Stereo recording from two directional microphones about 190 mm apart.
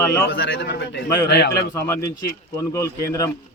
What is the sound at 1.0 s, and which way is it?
Speech, 15° left (ahead or behind).